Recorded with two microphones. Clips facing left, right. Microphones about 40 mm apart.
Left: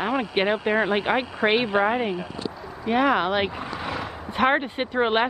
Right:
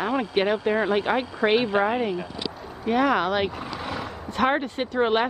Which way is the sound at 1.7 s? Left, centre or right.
Centre.